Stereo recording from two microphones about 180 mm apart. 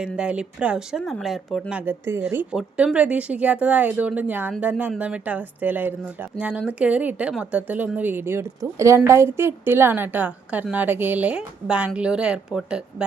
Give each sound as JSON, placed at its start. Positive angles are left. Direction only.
{"t": 0.0, "sound": "speech", "side_deg": -5}
{"t": 1.8, "sound": "a woman's voice", "side_deg": -10}